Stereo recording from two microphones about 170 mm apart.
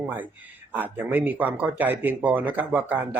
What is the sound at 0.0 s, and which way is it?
Speech, 10° right (ahead or behind).